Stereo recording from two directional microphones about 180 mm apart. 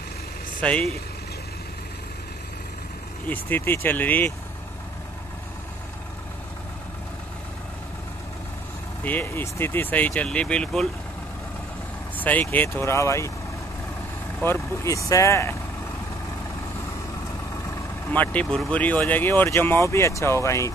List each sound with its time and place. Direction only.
0.6 s speech: 10° left (ahead or behind)
3.3 s speech: 10° left (ahead or behind)
9.0 s speech: 10° left (ahead or behind)
12.2 s speech: 10° left (ahead or behind)
14.4 s speech: 15° left (ahead or behind)
17.6 s speech: 10° left (ahead or behind)